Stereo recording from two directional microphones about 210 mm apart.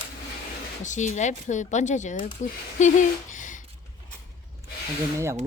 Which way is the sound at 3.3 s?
35° left (ahead or behind).